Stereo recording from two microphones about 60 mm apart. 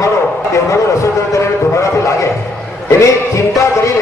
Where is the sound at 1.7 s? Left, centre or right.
Left.